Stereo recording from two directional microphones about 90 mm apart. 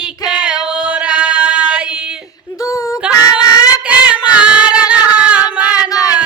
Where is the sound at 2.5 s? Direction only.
35° left (ahead or behind).